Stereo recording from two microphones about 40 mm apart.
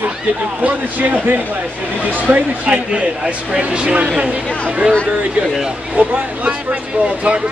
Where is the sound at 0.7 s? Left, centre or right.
Right.